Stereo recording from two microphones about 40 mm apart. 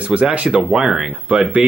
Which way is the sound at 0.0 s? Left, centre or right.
Right.